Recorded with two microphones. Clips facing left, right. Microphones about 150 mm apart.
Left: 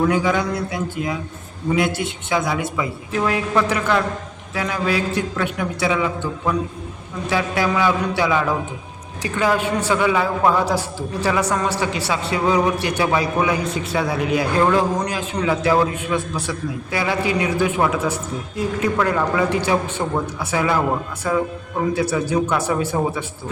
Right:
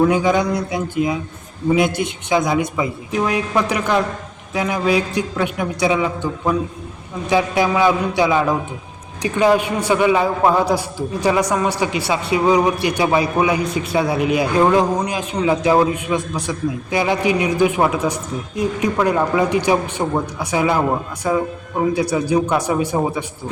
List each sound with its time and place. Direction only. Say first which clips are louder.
0.1 s a man's voice: right 3 dB; 20° right (ahead or behind)